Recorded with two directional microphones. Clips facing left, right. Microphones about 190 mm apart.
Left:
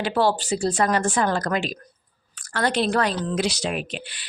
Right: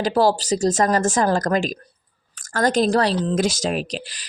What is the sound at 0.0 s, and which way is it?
Speech, 40° right (ahead or behind).